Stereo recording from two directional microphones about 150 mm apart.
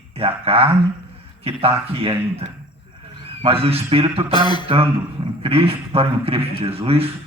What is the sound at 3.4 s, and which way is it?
A man's voice, 40° right (ahead or behind).